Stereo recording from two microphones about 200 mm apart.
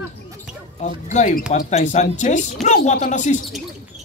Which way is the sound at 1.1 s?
35° left (ahead or behind).